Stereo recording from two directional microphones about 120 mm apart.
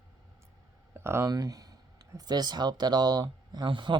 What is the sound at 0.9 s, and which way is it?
Speech, 20° right (ahead or behind).